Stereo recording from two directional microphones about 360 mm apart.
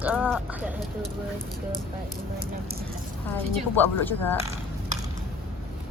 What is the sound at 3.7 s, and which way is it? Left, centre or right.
Speech, centre.